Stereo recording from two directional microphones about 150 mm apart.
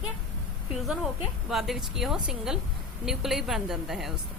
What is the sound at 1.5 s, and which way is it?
Speech, centre (ahead or behind).